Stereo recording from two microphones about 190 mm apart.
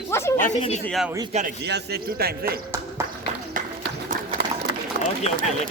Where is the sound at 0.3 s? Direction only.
40° left (ahead or behind).